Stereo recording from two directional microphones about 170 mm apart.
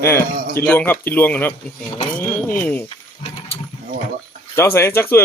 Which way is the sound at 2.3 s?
10° left (ahead or behind).